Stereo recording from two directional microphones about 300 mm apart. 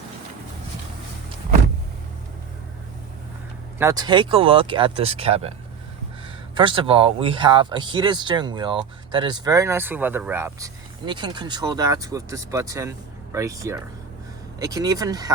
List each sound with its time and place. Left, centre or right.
3.8 s speech: centre